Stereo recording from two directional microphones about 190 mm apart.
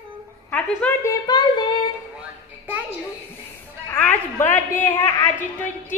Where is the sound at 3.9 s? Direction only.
10° left (ahead or behind).